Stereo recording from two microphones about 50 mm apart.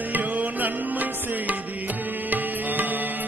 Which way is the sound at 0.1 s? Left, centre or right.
Right.